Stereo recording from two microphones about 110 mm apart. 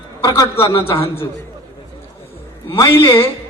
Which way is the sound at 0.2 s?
30° left (ahead or behind).